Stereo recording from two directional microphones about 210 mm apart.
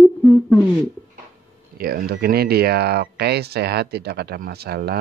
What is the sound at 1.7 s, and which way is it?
Speech, 45° right (ahead or behind).